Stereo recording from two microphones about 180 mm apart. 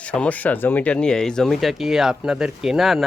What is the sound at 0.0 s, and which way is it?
Speech, 5° left (ahead or behind).